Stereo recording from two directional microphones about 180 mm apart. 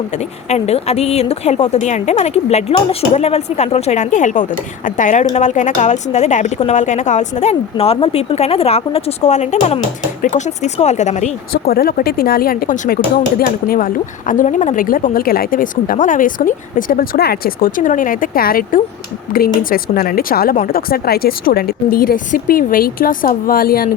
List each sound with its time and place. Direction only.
0.1 s a woman's voice: 40° left (ahead or behind)
11.6 s a woman's voice: 60° left (ahead or behind)